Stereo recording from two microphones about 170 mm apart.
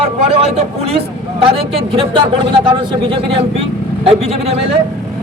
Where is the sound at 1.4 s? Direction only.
35° right (ahead or behind).